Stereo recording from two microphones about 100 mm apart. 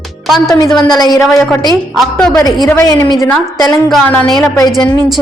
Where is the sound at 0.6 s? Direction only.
45° left (ahead or behind).